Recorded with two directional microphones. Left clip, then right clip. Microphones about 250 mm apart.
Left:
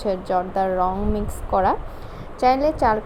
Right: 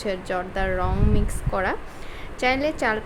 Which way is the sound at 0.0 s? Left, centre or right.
Centre.